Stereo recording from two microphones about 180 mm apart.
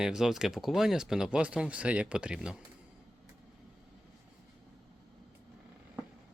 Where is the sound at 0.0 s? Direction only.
5° right (ahead or behind).